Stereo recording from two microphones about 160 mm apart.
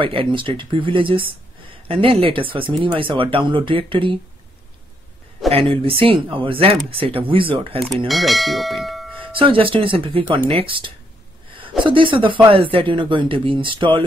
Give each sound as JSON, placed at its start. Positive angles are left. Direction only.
{"t": 0.0, "sound": "speech", "side_deg": -35}
{"t": 5.5, "sound": "speech", "side_deg": -35}
{"t": 8.1, "sound": "speech", "side_deg": 0}
{"t": 9.2, "sound": "speech", "side_deg": -35}